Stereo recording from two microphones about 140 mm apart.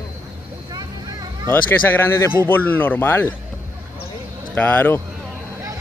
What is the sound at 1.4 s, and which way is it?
Speech, 15° left (ahead or behind).